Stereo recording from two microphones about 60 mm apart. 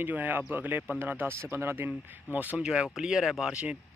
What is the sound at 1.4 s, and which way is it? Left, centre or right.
Speech, right.